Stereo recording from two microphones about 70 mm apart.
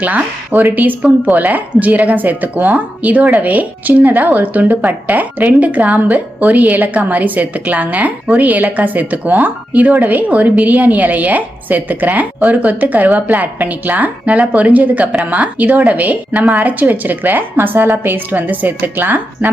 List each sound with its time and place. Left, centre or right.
0.0 s speech: right